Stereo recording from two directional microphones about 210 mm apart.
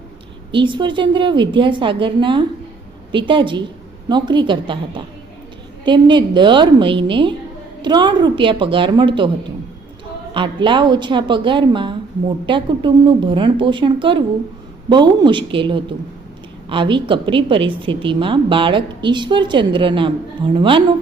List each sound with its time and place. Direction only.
0.5 s a woman's voice: 25° right (ahead or behind)
5.8 s a woman's voice: 20° right (ahead or behind)
10.3 s a woman's voice: 25° right (ahead or behind)